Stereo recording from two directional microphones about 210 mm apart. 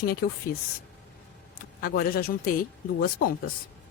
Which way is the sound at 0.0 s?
45° left (ahead or behind).